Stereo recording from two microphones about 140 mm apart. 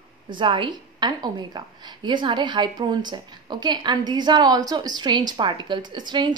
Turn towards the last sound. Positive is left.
turn(degrees=-30)  # may be behind; listen again after turning